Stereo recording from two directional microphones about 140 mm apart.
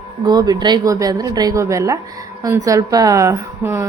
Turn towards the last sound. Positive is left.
turn(degrees=-20)  # may be behind; listen again after turning